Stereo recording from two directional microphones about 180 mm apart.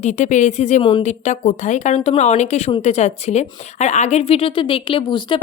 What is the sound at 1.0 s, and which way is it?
Speech, 40° left (ahead or behind).